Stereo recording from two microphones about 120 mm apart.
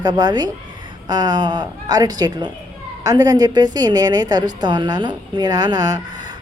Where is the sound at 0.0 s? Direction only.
35° right (ahead or behind).